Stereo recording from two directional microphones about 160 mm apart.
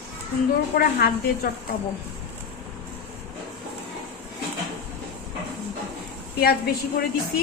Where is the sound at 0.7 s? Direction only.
75° left (ahead or behind).